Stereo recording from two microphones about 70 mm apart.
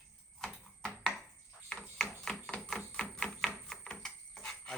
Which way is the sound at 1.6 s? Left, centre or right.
Centre.